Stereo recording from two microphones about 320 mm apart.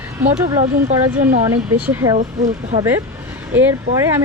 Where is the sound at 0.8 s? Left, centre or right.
Right.